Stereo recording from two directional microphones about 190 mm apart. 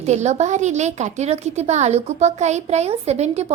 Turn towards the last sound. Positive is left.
turn(degrees=-35)  # may be behind; listen again after turning